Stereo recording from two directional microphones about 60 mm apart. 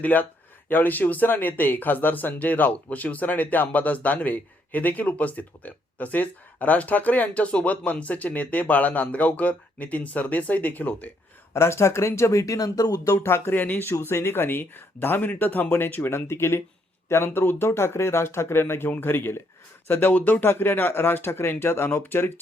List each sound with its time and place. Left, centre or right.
0.0 s speech: left
11.5 s speech: left
13.2 s speech: left
13.5 s speech: left
13.8 s speech: left
20.4 s speech: left